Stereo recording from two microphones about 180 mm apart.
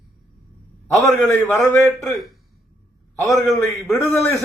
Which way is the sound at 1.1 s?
10° left (ahead or behind).